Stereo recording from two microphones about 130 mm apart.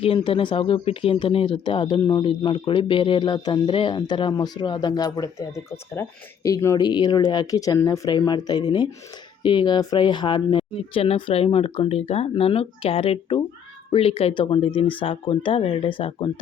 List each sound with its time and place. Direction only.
0.0 s speech: 45° left (ahead or behind); by 6.8 s 25° left (ahead or behind)
6.8 s speech: 35° left (ahead or behind)